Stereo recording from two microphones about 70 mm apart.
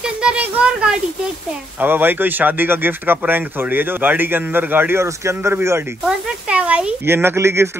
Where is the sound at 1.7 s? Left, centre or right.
Right.